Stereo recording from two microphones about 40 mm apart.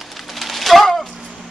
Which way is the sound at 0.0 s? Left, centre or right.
Centre.